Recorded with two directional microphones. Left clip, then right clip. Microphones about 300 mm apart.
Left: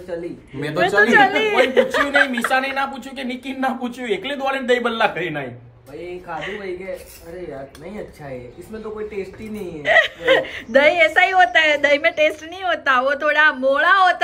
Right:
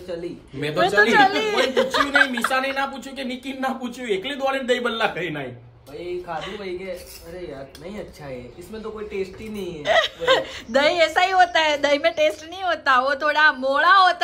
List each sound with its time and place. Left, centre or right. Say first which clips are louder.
1.0 s speech: left 3 dB; centre
9.8 s speech: left 3 dB; centre